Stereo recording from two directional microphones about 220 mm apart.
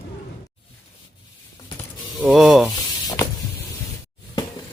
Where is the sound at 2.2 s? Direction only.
Centre (ahead or behind).